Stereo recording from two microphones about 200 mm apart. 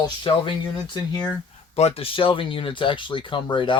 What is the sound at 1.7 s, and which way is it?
Speech, 30° left (ahead or behind).